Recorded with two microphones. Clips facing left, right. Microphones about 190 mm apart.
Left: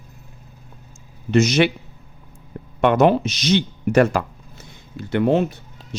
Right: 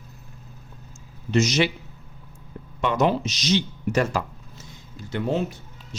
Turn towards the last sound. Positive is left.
turn(degrees=65)  # may be behind; listen again after turning